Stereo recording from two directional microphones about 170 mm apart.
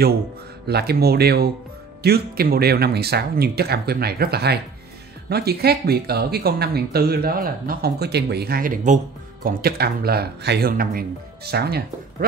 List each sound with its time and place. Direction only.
0.7 s speech: 70° right (ahead or behind)